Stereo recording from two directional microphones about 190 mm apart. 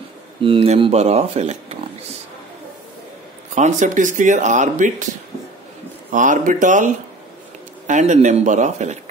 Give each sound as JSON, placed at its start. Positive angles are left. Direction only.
{"t": 0.4, "sound": "speech", "side_deg": -30}
{"t": 3.5, "sound": "speech", "side_deg": -40}
{"t": 6.1, "sound": "speech", "side_deg": -45}